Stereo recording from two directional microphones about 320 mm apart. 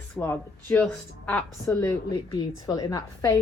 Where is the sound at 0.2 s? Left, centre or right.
Centre.